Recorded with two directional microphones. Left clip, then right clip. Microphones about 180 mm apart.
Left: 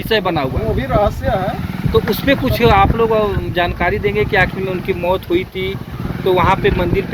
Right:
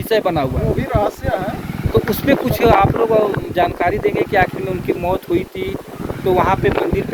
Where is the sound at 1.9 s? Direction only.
90° right.